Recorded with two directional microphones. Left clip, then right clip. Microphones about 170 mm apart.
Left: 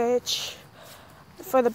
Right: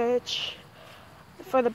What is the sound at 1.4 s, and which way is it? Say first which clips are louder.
Dog: left 2 dB; 15° left (ahead or behind).